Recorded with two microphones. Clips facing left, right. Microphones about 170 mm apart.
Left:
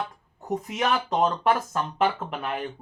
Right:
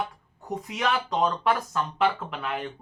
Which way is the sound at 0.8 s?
40° left (ahead or behind).